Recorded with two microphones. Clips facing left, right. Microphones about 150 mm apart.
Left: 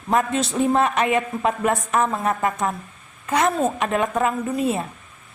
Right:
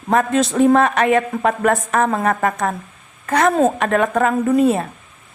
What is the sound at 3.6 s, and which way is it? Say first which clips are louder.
A woman's voice: right 5 dB; 50° right (ahead or behind).